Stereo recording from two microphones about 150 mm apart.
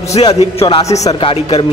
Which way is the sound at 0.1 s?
45° left (ahead or behind).